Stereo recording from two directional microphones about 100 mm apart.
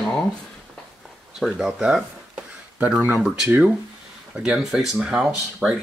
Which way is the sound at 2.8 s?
20° right (ahead or behind).